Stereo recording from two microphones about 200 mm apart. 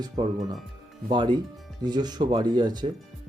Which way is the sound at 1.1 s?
20° right (ahead or behind).